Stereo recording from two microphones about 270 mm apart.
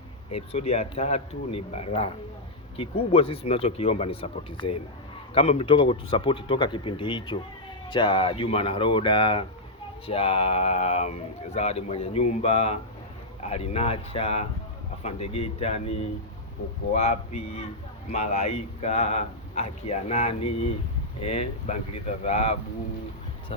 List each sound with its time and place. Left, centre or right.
0.3 s speech: left